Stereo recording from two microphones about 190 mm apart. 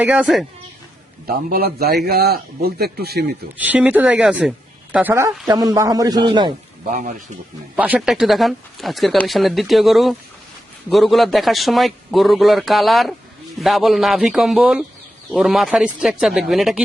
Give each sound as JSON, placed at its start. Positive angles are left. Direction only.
{"t": 0.0, "sound": "speech", "side_deg": -10}
{"t": 1.5, "sound": "a man's voice", "side_deg": -55}
{"t": 3.6, "sound": "a man's voice", "side_deg": -10}
{"t": 7.8, "sound": "speech", "side_deg": -5}